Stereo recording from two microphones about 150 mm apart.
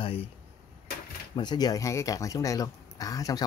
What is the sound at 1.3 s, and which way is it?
Speech, 30° left (ahead or behind).